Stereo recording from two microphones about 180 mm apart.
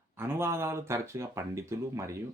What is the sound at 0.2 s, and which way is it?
Speech, 15° right (ahead or behind).